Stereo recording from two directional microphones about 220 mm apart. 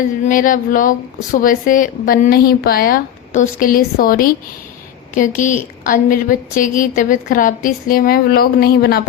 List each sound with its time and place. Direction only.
0.3 s a woman's voice: 35° left (ahead or behind)